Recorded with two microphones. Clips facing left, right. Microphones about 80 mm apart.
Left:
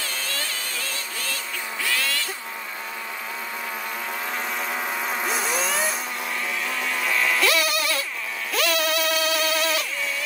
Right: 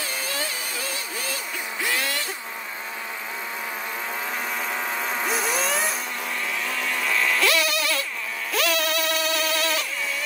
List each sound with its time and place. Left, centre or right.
0.0 s a sound: centre
4.6 s vehicle: centre
6.7 s bleat: centre
8.5 s music: centre